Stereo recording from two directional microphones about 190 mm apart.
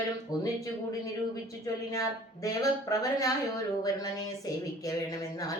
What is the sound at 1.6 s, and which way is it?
A woman's voice, 15° left (ahead or behind).